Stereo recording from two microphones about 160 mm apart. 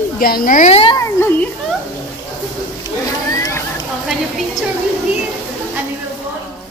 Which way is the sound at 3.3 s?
20° left (ahead or behind).